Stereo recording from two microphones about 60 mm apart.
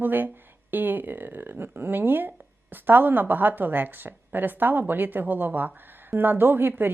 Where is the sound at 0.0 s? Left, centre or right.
Right.